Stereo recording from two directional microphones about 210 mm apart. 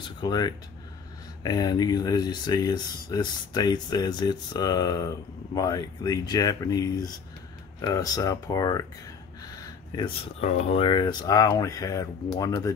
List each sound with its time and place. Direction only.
0.2 s speech: 20° left (ahead or behind)
9.5 s a sound: 20° left (ahead or behind)
10.4 s speech: 30° left (ahead or behind)